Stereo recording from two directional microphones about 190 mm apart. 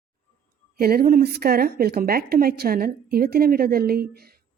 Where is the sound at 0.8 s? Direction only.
50° right (ahead or behind).